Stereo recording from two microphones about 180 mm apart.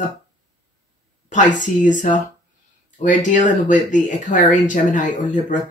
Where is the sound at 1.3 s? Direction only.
45° left (ahead or behind).